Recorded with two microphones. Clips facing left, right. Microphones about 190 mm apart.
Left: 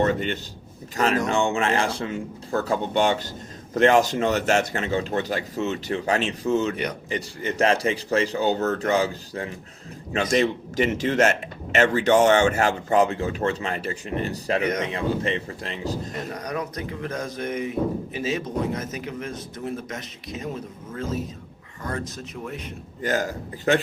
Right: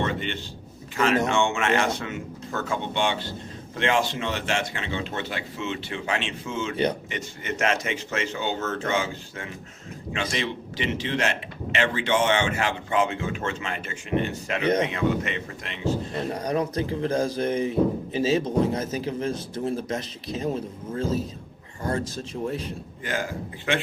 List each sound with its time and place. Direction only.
0.0 s a man's voice: 40° left (ahead or behind)
14.6 s a man's voice: 30° right (ahead or behind)
14.9 s a man's voice: 30° left (ahead or behind)
16.1 s speech: 30° right (ahead or behind)
23.0 s a man's voice: 40° left (ahead or behind)